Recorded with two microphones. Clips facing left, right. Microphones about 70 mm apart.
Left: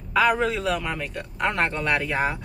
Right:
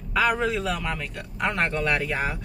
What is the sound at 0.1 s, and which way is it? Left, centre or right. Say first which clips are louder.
A woman's voice: left 2 dB; centre.